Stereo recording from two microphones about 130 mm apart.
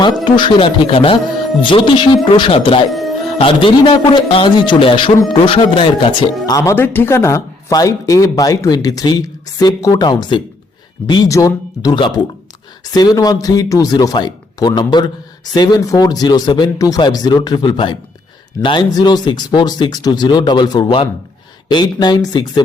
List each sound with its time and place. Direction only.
0.3 s a man's voice: 40° left (ahead or behind)
6.4 s speech: 25° left (ahead or behind)